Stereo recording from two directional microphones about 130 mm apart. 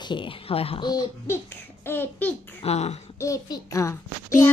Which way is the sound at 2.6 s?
55° left (ahead or behind).